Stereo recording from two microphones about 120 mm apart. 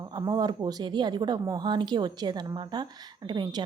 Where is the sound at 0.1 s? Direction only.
30° right (ahead or behind).